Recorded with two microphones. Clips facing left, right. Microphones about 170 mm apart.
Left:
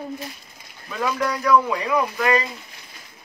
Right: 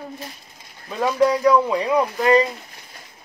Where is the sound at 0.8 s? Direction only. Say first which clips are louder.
Right 6 dB; 25° right (ahead or behind).